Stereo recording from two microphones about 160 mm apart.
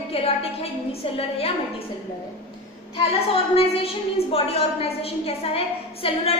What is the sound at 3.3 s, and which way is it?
A woman's voice, 35° left (ahead or behind).